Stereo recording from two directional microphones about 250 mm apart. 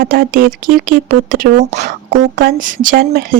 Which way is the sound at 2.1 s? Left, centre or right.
Right.